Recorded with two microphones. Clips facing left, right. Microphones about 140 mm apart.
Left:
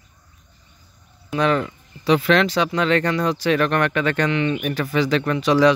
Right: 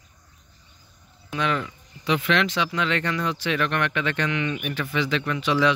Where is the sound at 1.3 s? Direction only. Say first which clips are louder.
Left 6 dB; 40° left (ahead or behind).